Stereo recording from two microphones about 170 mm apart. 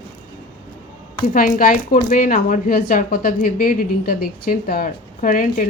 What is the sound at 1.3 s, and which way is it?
A woman's voice, 55° left (ahead or behind).